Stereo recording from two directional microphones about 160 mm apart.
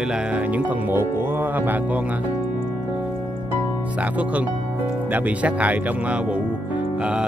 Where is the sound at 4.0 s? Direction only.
10° right (ahead or behind).